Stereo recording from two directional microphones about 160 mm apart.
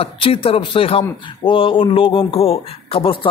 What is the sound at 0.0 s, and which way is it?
A man's voice, 35° left (ahead or behind).